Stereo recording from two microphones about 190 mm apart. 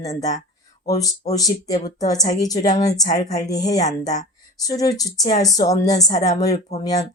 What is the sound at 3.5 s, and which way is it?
Speech, 20° left (ahead or behind).